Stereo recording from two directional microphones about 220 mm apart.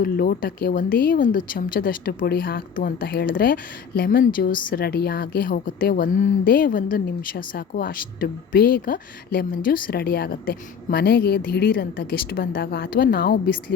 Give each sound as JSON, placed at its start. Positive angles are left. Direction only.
{"t": 0.0, "sound": "a woman's voice", "side_deg": 40}